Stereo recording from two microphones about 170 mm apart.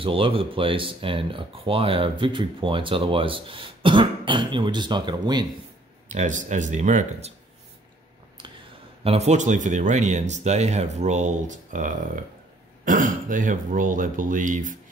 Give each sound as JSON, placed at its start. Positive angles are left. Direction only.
{"t": 0.0, "sound": "speech", "side_deg": -30}
{"t": 6.0, "sound": "speech", "side_deg": -45}
{"t": 9.0, "sound": "speech", "side_deg": -40}